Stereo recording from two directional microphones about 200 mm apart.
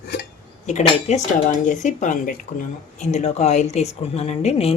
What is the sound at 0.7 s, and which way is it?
Speech, 35° left (ahead or behind).